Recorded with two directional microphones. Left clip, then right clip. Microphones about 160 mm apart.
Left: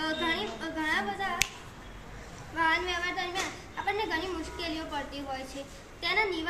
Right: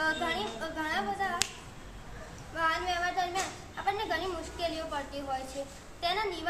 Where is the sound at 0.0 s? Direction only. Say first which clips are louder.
Even; 30° right (ahead or behind).